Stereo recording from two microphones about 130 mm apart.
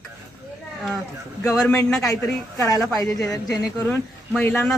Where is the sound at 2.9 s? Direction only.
25° left (ahead or behind).